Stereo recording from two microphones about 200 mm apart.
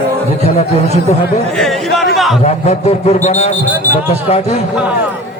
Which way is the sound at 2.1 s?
Centre (ahead or behind).